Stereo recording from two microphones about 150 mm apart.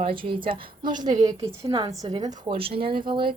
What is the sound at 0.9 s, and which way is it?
Speech, 55° right (ahead or behind).